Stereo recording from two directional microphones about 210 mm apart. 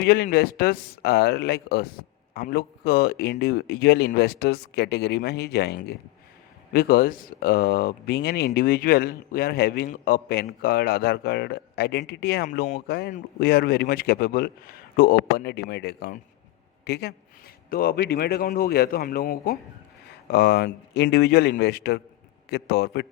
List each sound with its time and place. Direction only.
0.0 s speech: 50° left (ahead or behind)
12.5 s speech: 35° left (ahead or behind)